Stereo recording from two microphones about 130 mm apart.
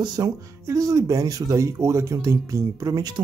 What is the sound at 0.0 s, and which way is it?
Speech, 30° right (ahead or behind).